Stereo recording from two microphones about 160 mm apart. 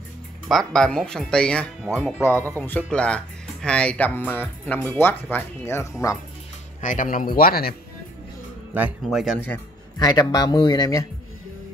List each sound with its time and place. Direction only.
0.5 s speech: 5° left (ahead or behind)
6.8 s speech: 55° left (ahead or behind)
8.7 s a man's voice: 10° right (ahead or behind)
9.2 s speech: centre (ahead or behind)
9.9 s speech: 25° left (ahead or behind)